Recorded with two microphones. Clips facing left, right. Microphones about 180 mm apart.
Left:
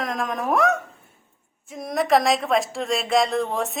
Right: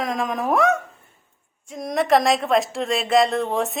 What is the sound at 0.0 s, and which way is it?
Speech, centre (ahead or behind).